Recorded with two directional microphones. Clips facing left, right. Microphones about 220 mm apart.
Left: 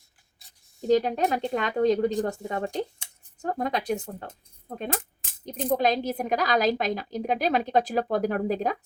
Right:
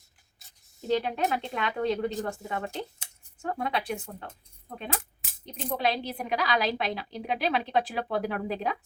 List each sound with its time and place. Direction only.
0.9 s speech: 40° left (ahead or behind)
5.5 s speech: 40° left (ahead or behind)